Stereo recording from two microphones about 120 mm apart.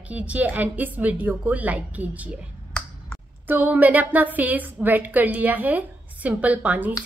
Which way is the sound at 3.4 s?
15° right (ahead or behind).